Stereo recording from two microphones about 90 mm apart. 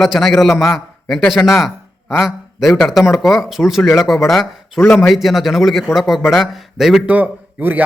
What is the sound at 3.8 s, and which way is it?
Speech, 35° left (ahead or behind).